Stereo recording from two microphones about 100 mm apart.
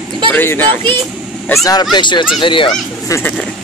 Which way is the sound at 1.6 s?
45° left (ahead or behind).